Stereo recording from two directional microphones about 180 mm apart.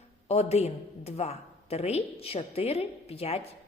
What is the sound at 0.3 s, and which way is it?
A woman's voice, 35° left (ahead or behind).